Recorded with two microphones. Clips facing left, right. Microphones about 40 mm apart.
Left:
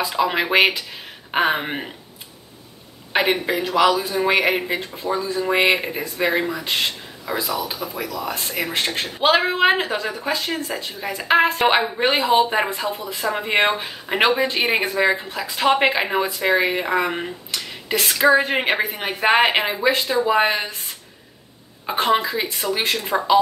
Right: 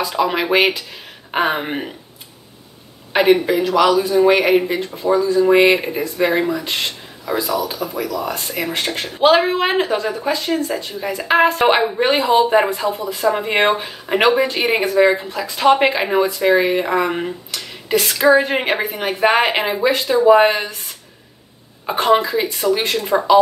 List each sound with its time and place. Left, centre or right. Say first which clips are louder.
0.0 s a man's voice: right 2 dB; centre
3.1 s a sound: right 6 dB; centre
3.5 s a man's voice: right 3 dB; centre
5.4 s a man's voice: right 5 dB; centre
8.7 s speech: right 1 dB; left
9.3 s a man's voice: even; centre
21.8 s speech: right 4 dB; centre